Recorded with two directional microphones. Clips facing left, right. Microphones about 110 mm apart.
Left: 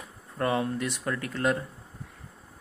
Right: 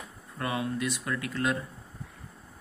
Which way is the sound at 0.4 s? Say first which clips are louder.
Left 4 dB; 35° left (ahead or behind).